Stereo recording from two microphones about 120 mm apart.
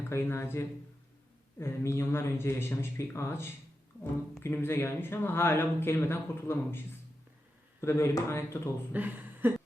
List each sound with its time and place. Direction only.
0.1 s speech: 20° left (ahead or behind)
8.9 s speech: 15° right (ahead or behind)